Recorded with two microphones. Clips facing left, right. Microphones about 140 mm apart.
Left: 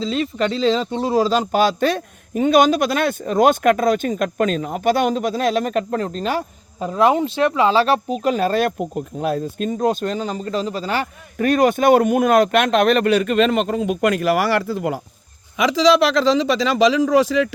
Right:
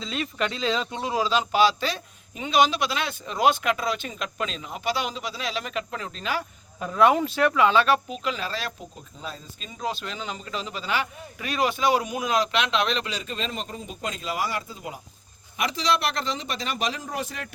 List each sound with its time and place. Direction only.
0.0 s speech: 30° left (ahead or behind); by 15.0 s 70° left (ahead or behind)
15.5 s speech: 90° left